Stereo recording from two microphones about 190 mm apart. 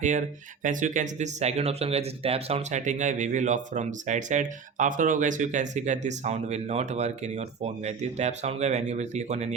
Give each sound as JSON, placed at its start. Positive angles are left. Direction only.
{"t": 0.0, "sound": "speech", "side_deg": -40}